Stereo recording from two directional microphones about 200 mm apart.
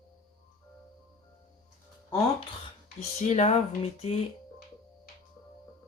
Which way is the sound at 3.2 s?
35° left (ahead or behind).